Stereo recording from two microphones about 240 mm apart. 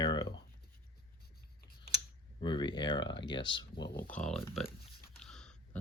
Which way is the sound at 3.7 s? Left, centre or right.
Left.